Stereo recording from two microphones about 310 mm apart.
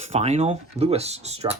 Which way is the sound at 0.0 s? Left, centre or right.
Right.